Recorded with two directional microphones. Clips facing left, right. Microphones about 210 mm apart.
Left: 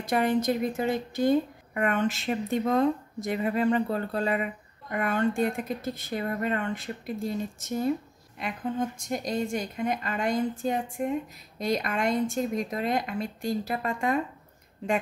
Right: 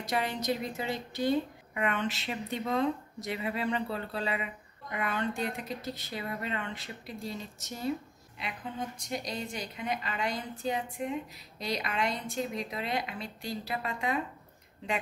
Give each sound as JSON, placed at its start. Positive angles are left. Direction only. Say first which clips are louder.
{"t": 0.0, "sound": "a woman's voice", "louder": "left 8 dB", "side_deg": 50}